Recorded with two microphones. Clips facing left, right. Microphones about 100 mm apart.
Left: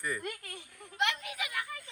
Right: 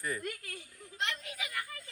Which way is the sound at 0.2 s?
55° left (ahead or behind).